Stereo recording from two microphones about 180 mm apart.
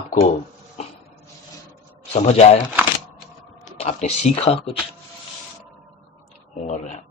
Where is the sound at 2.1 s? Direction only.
35° left (ahead or behind).